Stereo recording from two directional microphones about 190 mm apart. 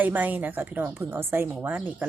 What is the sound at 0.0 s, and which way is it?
A woman's voice, 10° right (ahead or behind).